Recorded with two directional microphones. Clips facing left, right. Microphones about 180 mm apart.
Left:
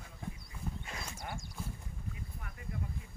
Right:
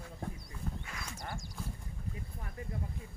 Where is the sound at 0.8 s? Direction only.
25° left (ahead or behind).